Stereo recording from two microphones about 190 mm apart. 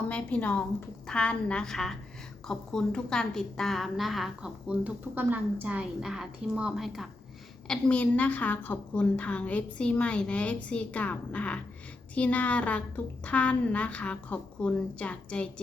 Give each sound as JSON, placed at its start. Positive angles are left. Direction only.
{"t": 0.1, "sound": "a woman's voice", "side_deg": 5}